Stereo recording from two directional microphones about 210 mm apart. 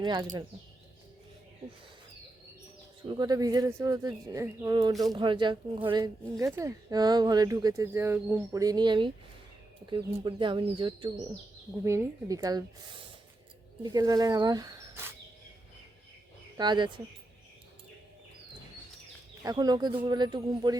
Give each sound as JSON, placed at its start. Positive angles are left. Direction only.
{"t": 0.0, "sound": "a woman's voice", "side_deg": -20}
{"t": 3.1, "sound": "a woman's voice", "side_deg": -20}
{"t": 11.8, "sound": "speech", "side_deg": -15}
{"t": 16.6, "sound": "a woman's voice", "side_deg": -20}
{"t": 19.4, "sound": "a woman's voice", "side_deg": -20}